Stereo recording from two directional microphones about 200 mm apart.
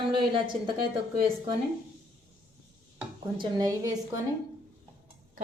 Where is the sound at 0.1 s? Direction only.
25° right (ahead or behind).